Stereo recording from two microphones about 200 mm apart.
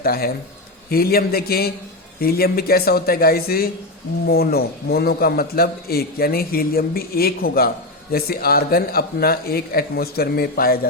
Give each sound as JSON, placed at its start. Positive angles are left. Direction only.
{"t": 0.0, "sound": "a man's voice", "side_deg": 50}